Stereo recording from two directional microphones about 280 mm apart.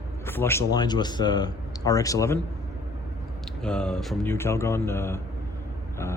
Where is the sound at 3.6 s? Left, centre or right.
Centre.